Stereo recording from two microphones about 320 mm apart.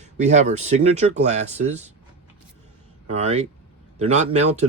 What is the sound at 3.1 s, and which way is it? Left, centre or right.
Speech, centre.